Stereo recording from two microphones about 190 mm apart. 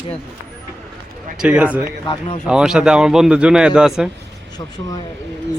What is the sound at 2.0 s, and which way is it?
Speech, 25° left (ahead or behind).